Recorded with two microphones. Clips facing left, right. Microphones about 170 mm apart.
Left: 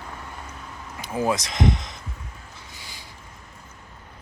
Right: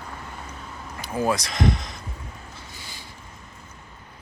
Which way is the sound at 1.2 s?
20° left (ahead or behind).